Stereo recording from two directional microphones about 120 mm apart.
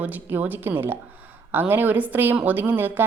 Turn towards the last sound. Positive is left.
turn(degrees=-15)  # may be behind; listen again after turning